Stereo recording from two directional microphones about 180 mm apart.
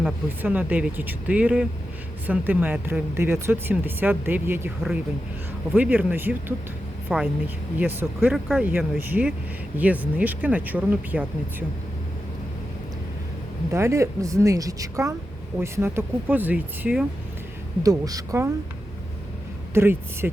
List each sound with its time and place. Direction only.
0.0 s speech: 10° right (ahead or behind)
5.7 s speech: 10° right (ahead or behind)
13.7 s speech: 15° right (ahead or behind)
17.8 s speech: 20° right (ahead or behind)
19.7 s speech: 10° right (ahead or behind)